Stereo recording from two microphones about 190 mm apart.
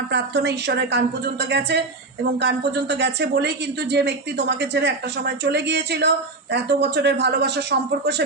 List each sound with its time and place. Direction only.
0.1 s speech: 65° right (ahead or behind)